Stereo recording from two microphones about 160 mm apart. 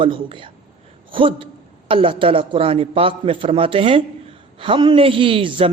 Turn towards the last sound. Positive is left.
turn(degrees=-35)  # may be behind; listen again after turning